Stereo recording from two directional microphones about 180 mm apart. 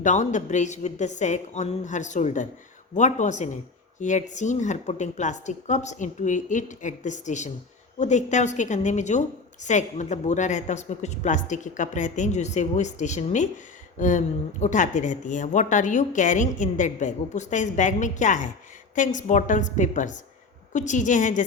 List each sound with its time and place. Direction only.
0.0 s a woman's voice: 40° left (ahead or behind)